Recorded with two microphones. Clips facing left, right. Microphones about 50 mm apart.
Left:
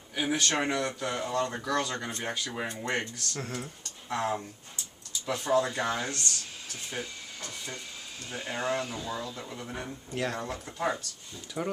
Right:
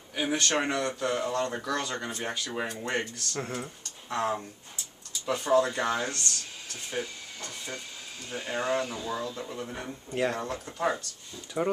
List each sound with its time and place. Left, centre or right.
0.1 s speech: centre
3.3 s speech: centre
4.1 s speech: centre